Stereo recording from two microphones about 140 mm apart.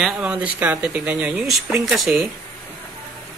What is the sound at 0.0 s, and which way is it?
Speech, 5° right (ahead or behind).